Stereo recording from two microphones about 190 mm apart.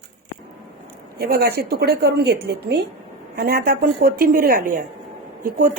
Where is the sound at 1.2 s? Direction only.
55° right (ahead or behind).